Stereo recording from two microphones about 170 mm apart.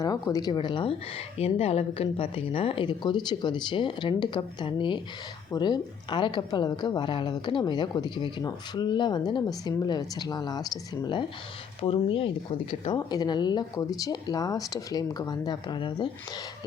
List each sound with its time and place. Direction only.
0.0 s a woman's voice: 20° left (ahead or behind)